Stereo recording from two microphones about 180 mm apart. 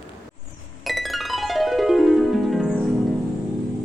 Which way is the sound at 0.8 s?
Centre (ahead or behind).